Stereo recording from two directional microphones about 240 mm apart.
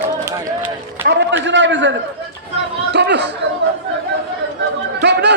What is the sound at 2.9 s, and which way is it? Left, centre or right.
Chatter, right.